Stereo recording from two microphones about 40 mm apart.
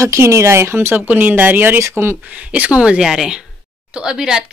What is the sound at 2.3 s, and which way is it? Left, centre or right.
A woman's voice, right.